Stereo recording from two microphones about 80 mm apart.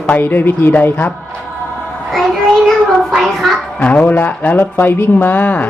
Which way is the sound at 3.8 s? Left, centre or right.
Left.